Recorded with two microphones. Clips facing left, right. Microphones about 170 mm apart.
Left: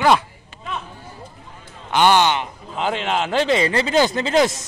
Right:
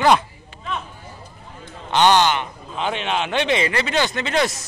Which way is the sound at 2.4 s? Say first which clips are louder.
Left 2 dB; 30° left (ahead or behind).